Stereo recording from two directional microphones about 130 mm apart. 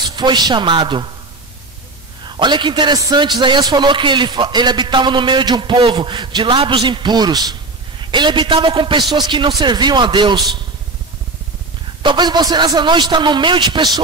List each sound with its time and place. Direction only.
0.1 s a man's voice: 35° right (ahead or behind)
2.2 s a man's voice: 35° right (ahead or behind)
12.0 s a man's voice: 35° right (ahead or behind)